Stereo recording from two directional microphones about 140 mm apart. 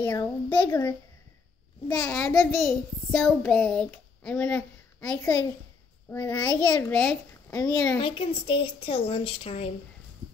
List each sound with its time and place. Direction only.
0.0 s a child's voice: 15° left (ahead or behind)
1.9 s a child's voice: 5° left (ahead or behind); by 6.5 s 25° left (ahead or behind)
6.9 s a child's voice: 5° left (ahead or behind)
7.5 s speech: 25° left (ahead or behind)
8.0 s a woman's voice: 40° left (ahead or behind)